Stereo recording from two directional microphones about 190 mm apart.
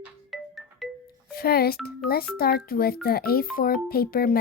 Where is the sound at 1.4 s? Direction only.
55° left (ahead or behind).